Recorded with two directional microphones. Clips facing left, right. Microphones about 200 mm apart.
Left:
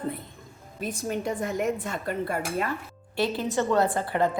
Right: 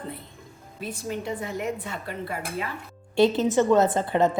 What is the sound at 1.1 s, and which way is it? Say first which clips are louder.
A woman's voice: left 2 dB; 50° left (ahead or behind).